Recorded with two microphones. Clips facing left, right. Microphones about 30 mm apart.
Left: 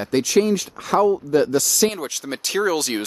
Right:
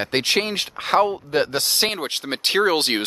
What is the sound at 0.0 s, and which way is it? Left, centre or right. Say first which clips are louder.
Speech: left 3 dB; right.